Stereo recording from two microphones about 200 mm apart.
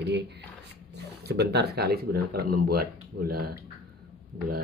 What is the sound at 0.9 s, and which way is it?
Speech, 55° right (ahead or behind).